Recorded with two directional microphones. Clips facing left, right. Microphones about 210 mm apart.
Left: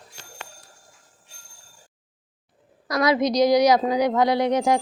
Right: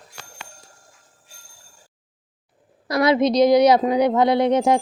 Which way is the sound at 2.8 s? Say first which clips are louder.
Right 3 dB; 30° right (ahead or behind).